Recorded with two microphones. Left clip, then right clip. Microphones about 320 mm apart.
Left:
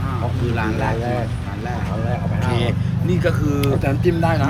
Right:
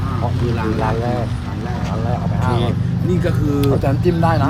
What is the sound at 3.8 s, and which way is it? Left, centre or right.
Speech, centre.